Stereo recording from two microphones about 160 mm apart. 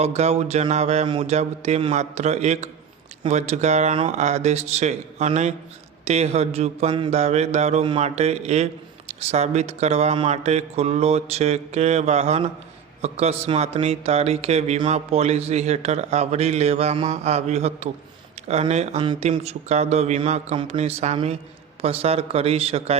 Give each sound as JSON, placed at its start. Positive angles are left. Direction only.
{"t": 0.0, "sound": "mantra", "side_deg": -40}
{"t": 13.0, "sound": "a man's voice", "side_deg": -40}